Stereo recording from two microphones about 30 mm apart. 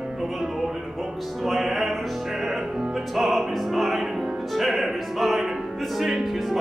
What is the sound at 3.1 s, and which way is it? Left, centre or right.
Opera, centre.